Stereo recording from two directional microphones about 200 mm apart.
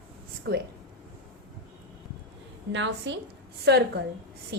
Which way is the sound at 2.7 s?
65° right (ahead or behind).